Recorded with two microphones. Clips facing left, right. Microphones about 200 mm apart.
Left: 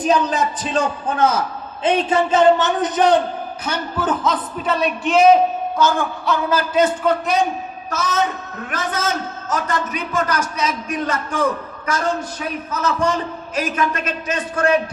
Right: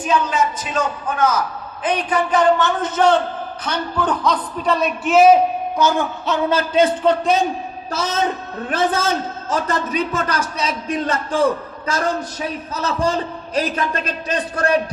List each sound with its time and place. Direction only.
0.0 s a man's voice: 35° left (ahead or behind); by 3.2 s 15° left (ahead or behind)
3.7 s a man's voice: 5° left (ahead or behind)
5.7 s a man's voice: 15° right (ahead or behind)
12.7 s a man's voice: 30° right (ahead or behind)